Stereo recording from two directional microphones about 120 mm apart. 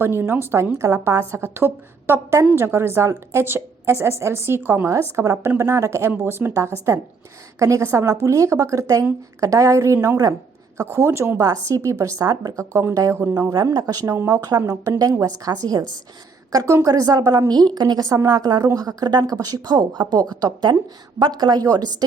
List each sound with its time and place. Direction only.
0.0 s a woman's voice: 20° right (ahead or behind)